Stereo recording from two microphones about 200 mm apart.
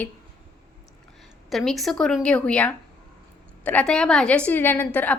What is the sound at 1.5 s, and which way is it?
A woman's voice, centre (ahead or behind).